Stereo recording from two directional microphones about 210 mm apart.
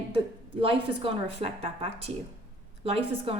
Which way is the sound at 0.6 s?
25° right (ahead or behind).